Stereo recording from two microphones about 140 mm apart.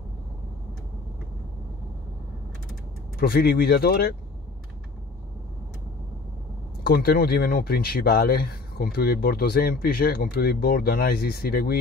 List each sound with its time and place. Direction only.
3.2 s speech: 90° left
6.9 s speech: 90° left